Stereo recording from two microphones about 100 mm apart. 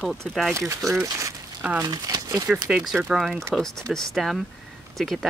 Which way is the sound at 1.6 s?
15° right (ahead or behind).